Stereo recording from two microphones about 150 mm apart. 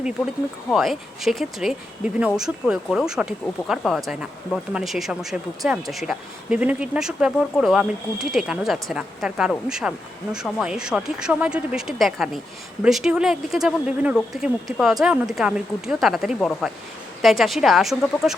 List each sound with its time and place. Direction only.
0.7 s speech: centre (ahead or behind)